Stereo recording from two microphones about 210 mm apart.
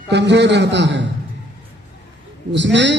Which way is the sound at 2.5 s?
55° right (ahead or behind).